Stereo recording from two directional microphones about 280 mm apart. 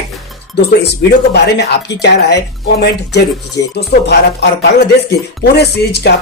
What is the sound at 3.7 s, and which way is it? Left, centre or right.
Speech, left.